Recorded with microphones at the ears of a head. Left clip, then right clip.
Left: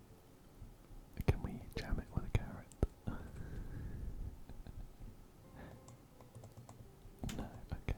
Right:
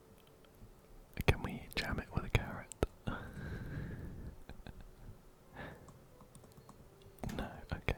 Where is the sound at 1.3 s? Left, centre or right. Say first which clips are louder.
Right 6 dB; right.